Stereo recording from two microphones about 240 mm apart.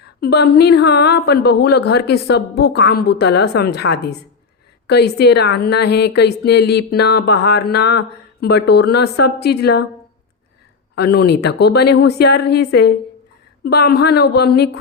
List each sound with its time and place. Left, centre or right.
0.0 s a woman's voice: left
10.9 s a woman's voice: left